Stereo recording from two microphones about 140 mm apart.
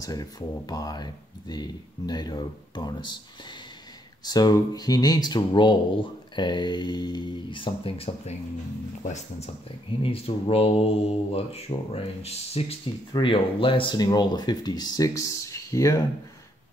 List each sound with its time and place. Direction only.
0.0 s speech: 25° left (ahead or behind); by 8.4 s 40° left (ahead or behind)
10.0 s speech: 40° left (ahead or behind); by 16.0 s 25° left (ahead or behind)